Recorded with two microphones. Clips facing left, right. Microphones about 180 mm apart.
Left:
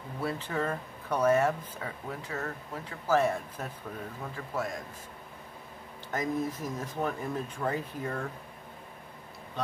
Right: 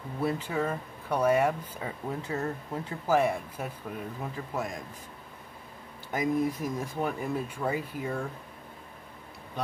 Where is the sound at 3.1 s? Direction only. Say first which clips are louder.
Right 1 dB; 15° right (ahead or behind).